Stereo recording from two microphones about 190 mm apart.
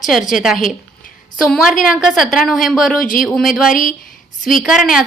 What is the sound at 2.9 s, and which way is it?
Speech, 45° left (ahead or behind).